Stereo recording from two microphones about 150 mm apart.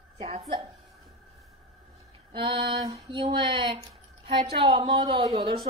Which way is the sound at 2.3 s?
35° right (ahead or behind).